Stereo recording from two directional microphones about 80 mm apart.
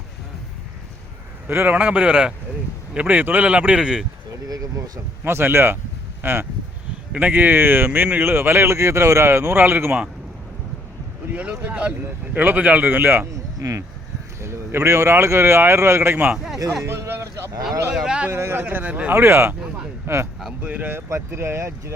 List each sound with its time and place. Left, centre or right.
1.5 s speech: right; by 4.0 s centre
4.3 s a sound: right
5.2 s a man's voice: right
11.3 s a man's voice: centre
13.6 s speech: right
14.4 s a man's voice: right
16.3 s speech: centre
16.8 s a sound: right
17.9 s speech: centre
18.3 s a man's voice: right
19.1 s a man's voice: right
21.1 s a man's voice: right